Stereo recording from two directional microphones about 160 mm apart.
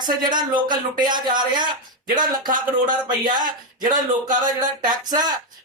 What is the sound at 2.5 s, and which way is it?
Speech, 55° right (ahead or behind).